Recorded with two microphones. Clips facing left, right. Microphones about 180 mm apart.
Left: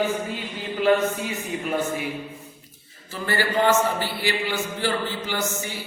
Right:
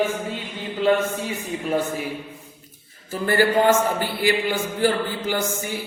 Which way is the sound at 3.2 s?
50° right (ahead or behind).